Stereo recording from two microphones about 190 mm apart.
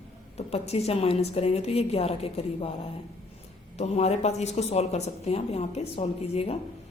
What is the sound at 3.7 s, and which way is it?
A woman's voice, 35° left (ahead or behind).